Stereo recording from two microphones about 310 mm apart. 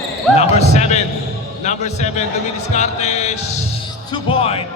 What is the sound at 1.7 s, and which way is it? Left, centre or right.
Speech, left.